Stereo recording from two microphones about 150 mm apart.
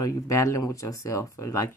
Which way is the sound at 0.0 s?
20° left (ahead or behind).